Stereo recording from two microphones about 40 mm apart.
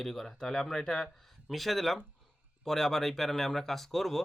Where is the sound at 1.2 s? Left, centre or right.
Centre.